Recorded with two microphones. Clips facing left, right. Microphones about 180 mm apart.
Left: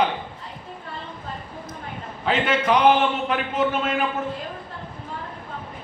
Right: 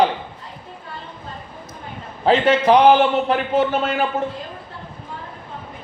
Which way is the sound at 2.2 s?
35° right (ahead or behind).